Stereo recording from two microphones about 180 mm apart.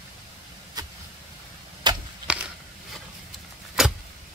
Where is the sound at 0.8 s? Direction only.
20° right (ahead or behind).